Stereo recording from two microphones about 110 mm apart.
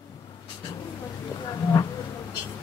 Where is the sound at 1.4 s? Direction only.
35° left (ahead or behind).